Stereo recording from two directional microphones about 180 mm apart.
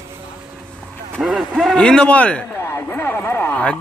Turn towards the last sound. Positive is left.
turn(degrees=10)  # may be behind; listen again after turning